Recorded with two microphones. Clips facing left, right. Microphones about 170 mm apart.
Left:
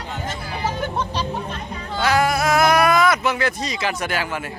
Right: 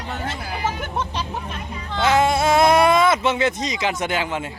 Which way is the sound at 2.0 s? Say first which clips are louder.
Right 1 dB; 25° right (ahead or behind).